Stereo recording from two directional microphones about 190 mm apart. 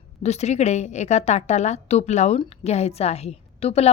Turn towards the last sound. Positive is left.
turn(degrees=35)  # may be behind; listen again after turning